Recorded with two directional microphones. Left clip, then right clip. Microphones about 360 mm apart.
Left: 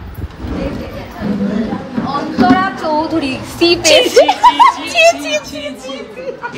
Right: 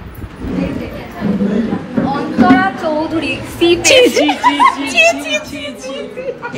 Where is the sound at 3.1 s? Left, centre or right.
Left.